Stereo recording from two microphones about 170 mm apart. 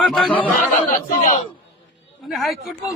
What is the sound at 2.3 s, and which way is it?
Speech, centre (ahead or behind).